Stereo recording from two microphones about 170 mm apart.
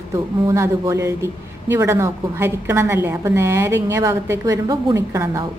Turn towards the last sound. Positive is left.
turn(degrees=-15)  # may be behind; listen again after turning